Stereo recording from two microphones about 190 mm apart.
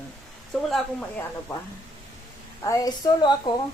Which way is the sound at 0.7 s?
5° left (ahead or behind).